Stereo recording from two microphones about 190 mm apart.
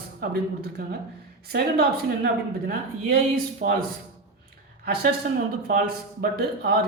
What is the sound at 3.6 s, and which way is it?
Speech, 45° right (ahead or behind).